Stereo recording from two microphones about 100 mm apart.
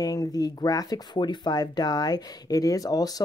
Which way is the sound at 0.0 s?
40° left (ahead or behind).